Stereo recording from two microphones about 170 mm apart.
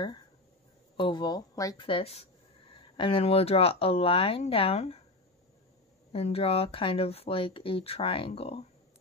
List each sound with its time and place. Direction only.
0.9 s speech: 25° left (ahead or behind)
1.9 s speech: 35° left (ahead or behind)
6.1 s speech: 35° left (ahead or behind)